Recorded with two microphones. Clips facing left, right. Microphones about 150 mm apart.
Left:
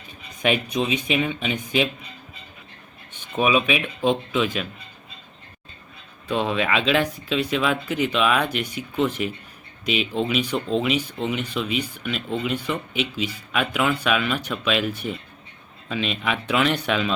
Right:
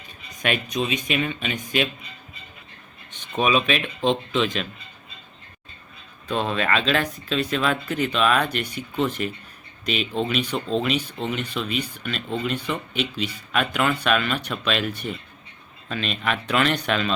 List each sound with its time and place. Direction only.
0.4 s speech: 15° left (ahead or behind)
3.1 s speech: 10° left (ahead or behind)
6.2 s speech: 10° left (ahead or behind)